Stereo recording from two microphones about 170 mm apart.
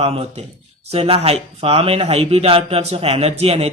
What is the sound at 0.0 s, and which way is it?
Speech, 35° right (ahead or behind).